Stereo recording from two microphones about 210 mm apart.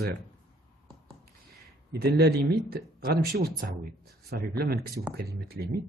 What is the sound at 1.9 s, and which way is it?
Speech, 50° right (ahead or behind).